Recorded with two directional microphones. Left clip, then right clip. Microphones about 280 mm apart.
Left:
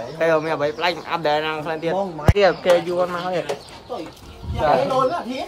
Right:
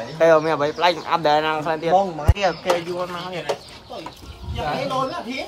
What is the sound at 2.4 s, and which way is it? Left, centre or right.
Speech, left.